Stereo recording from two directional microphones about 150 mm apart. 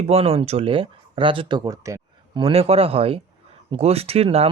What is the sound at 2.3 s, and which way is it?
Speech, 40° right (ahead or behind).